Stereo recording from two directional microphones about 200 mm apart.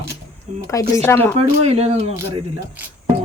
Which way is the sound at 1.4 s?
30° right (ahead or behind).